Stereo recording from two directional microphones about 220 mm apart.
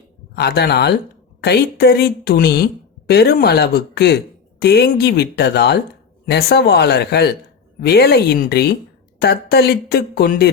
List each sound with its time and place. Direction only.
0.3 s speech: 45° left (ahead or behind)